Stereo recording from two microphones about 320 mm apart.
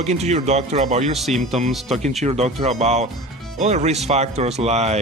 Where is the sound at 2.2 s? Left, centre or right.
Centre.